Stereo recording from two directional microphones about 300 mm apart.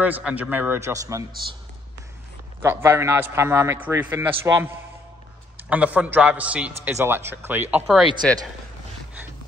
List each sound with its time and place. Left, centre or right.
0.0 s a man's voice: centre
2.6 s a man's voice: centre
5.7 s a man's voice: centre